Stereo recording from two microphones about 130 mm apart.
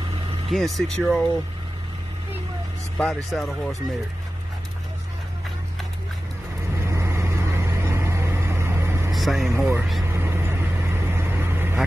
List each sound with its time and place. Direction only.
0.5 s speech: centre (ahead or behind)
3.0 s speech: centre (ahead or behind)
6.9 s vehicle: 20° right (ahead or behind)
9.1 s speech: centre (ahead or behind)
10.1 s vehicle: 20° right (ahead or behind)